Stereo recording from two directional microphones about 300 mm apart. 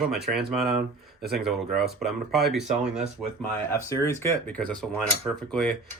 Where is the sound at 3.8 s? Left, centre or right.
Centre.